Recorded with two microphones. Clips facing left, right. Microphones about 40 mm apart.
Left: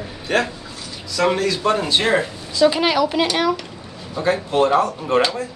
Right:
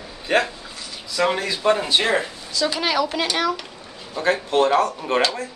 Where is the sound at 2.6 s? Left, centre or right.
Centre.